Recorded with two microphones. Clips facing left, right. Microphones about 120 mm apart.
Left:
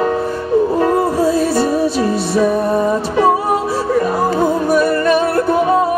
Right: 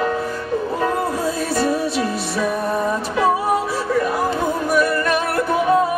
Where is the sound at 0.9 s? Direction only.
35° left (ahead or behind).